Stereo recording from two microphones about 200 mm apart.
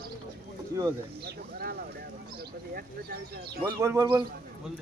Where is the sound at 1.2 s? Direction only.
50° right (ahead or behind).